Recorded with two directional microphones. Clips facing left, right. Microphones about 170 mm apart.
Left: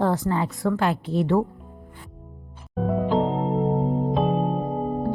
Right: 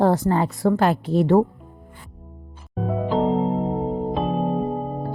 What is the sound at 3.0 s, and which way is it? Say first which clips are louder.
Music: right 3 dB; centre (ahead or behind).